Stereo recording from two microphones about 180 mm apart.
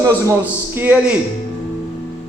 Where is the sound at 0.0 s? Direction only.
15° right (ahead or behind).